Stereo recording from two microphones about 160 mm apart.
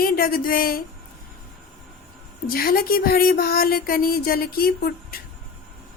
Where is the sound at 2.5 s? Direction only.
65° left (ahead or behind).